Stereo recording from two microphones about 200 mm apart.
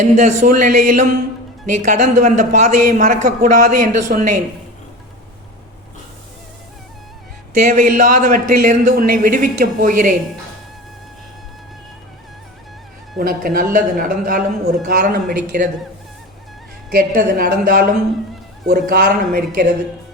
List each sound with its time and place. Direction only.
0.0 s a man's voice: 35° right (ahead or behind)
7.5 s speech: 40° right (ahead or behind)
13.1 s speech: 45° right (ahead or behind)
16.9 s speech: 45° right (ahead or behind)